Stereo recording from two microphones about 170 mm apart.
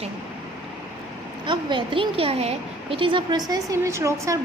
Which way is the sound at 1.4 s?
30° right (ahead or behind).